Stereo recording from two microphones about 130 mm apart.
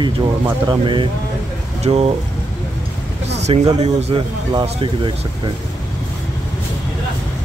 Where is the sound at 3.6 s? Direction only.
40° right (ahead or behind).